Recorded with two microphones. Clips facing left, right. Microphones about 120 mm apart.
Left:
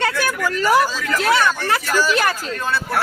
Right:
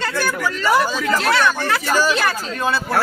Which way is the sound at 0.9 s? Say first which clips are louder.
Right 3 dB; 25° right (ahead or behind).